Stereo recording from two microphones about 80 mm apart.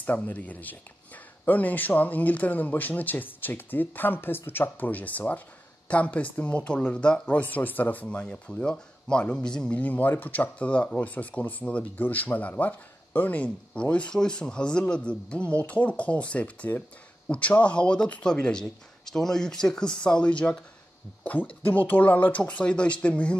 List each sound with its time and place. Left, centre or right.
0.0 s speech: centre
9.7 s speech: centre